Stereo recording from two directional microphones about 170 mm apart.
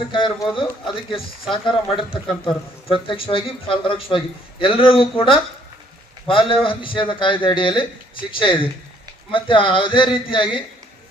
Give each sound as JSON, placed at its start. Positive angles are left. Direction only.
{"t": 0.5, "sound": "a man's voice", "side_deg": 30}